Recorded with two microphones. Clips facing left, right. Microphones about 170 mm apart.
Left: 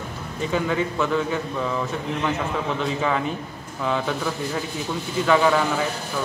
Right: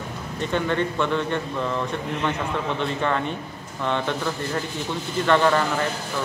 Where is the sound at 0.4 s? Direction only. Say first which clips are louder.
Even; 5° left (ahead or behind).